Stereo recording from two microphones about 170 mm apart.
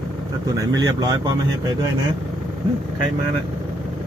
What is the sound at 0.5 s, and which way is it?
Speech, 25° right (ahead or behind).